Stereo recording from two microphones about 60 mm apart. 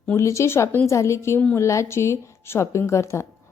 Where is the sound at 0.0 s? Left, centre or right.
Left.